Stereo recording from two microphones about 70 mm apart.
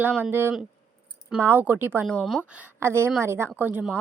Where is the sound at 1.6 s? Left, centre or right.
Right.